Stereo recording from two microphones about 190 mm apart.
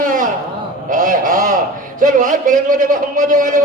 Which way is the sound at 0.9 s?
45° right (ahead or behind).